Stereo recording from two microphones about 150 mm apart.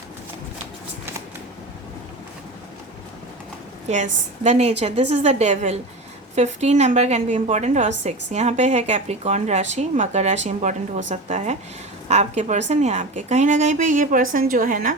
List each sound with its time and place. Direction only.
3.8 s a woman's voice: 50° right (ahead or behind)